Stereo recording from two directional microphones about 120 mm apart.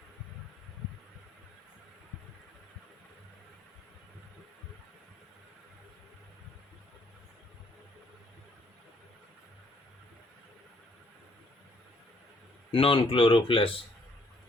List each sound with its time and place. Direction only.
12.7 s speech: 45° left (ahead or behind)